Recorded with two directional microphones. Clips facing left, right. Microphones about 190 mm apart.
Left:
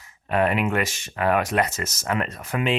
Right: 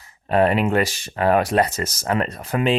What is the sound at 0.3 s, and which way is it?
Speech, 35° right (ahead or behind).